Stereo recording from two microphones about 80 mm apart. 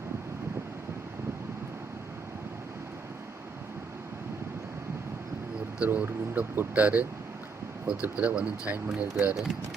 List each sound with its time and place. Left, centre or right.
5.8 s speech: right
9.3 s speech: centre